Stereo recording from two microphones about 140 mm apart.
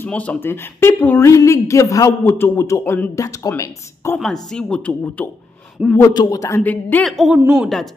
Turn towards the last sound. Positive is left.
turn(degrees=-10)  # may be behind; listen again after turning